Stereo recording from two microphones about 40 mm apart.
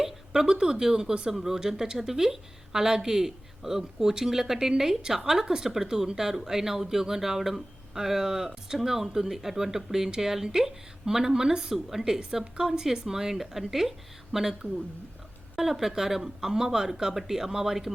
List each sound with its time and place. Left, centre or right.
0.4 s speech: right
1.3 s speech: centre